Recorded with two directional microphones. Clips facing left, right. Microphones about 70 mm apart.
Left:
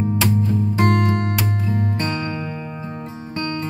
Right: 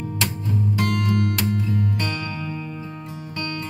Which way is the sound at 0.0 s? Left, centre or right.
Left.